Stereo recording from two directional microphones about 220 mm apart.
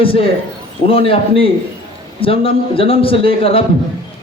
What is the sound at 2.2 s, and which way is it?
Speech, 25° left (ahead or behind).